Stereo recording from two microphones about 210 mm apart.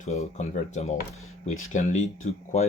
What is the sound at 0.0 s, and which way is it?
Speech, 35° left (ahead or behind).